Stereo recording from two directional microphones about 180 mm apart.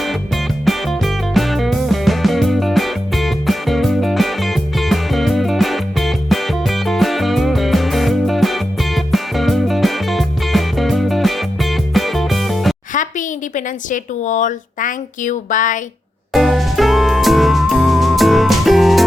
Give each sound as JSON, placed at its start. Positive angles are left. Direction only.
{"t": 0.6, "sound": "music", "side_deg": 0}
{"t": 12.9, "sound": "a sound", "side_deg": 45}
{"t": 13.9, "sound": "speech", "side_deg": 45}
{"t": 16.3, "sound": "music", "side_deg": 0}